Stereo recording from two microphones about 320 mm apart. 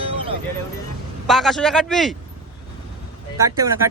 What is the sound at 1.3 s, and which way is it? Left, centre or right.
Speech, centre.